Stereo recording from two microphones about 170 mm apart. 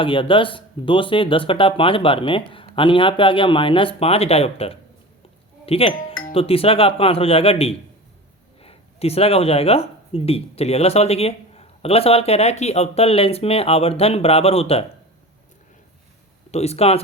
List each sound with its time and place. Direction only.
0.0 s speech: 30° left (ahead or behind)
16.5 s speech: 40° left (ahead or behind)